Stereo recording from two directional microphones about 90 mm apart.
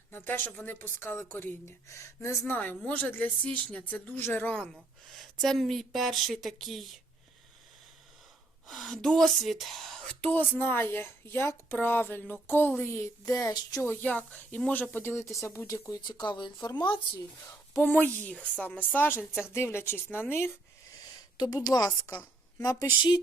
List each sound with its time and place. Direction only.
0.1 s speech: 25° left (ahead or behind)
2.5 s speech: 20° left (ahead or behind)
4.5 s speech: 5° left (ahead or behind)
8.6 s speech: centre (ahead or behind); by 13.1 s 25° left (ahead or behind)
13.2 s a sound: 40° left (ahead or behind)
13.8 s speech: 20° left (ahead or behind)
15.6 s speech: 40° left (ahead or behind)
16.0 s speech: 60° left (ahead or behind)
17.2 s speech: 30° left (ahead or behind)
17.9 s speech: 20° left (ahead or behind)
21.5 s a sound: 45° left (ahead or behind)
22.1 s a sound: 25° left (ahead or behind)